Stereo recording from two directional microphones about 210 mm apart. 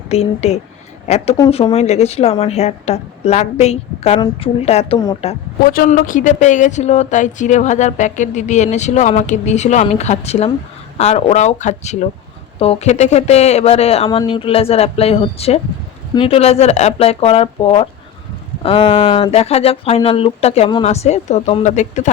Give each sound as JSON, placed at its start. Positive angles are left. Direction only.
{"t": 0.1, "sound": "a woman's voice", "side_deg": 30}
{"t": 5.6, "sound": "a woman's voice", "side_deg": 45}